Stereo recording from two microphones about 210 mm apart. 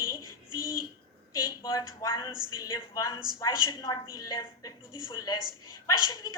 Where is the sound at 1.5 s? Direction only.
15° left (ahead or behind).